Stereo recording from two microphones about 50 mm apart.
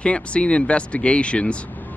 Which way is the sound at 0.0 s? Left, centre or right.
Left.